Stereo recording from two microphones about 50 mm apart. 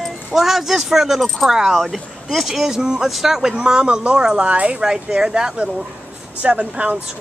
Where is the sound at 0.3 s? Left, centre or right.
Centre.